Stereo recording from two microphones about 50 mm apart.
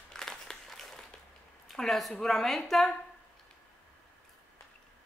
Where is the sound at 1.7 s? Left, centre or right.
Centre.